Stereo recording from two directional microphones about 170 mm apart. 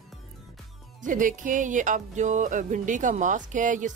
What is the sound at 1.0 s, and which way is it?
Music, 50° right (ahead or behind).